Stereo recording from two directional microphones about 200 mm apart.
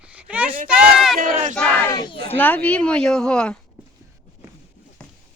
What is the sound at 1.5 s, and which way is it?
Child singing, 5° left (ahead or behind).